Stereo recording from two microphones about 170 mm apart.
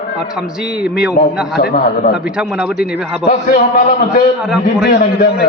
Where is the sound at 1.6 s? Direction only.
65° left (ahead or behind).